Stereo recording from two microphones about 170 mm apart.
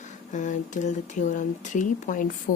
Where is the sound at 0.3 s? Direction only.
45° left (ahead or behind).